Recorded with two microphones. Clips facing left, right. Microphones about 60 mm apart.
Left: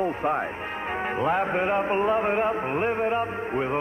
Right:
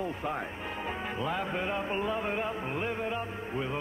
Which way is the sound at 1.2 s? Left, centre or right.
Left.